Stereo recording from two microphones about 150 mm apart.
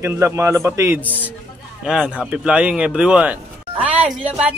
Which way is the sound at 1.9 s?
5° right (ahead or behind).